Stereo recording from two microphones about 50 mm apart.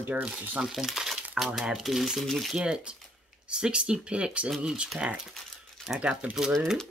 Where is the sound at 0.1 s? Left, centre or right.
Right.